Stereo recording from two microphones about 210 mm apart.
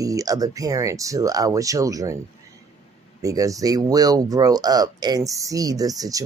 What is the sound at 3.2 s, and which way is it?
Speech, 15° right (ahead or behind).